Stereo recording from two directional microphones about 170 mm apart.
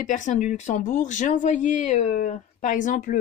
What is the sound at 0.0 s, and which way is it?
Speech, 50° left (ahead or behind).